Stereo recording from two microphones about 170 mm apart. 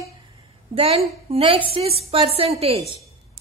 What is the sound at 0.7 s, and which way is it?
A woman's voice, 35° right (ahead or behind).